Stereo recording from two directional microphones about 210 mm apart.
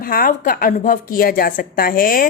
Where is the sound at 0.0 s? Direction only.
45° left (ahead or behind).